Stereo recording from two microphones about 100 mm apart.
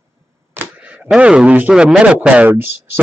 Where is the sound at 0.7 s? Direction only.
15° right (ahead or behind).